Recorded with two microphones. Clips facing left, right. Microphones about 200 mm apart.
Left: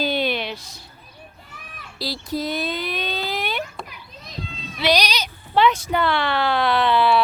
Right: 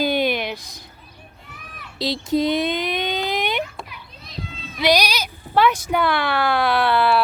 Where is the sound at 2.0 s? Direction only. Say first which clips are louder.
Right 6 dB; 20° right (ahead or behind).